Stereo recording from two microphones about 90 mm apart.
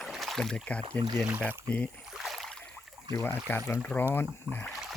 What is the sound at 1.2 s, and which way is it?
Speech, 15° right (ahead or behind).